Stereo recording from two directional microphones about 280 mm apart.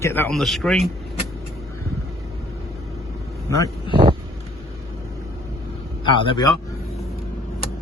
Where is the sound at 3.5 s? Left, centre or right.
Centre.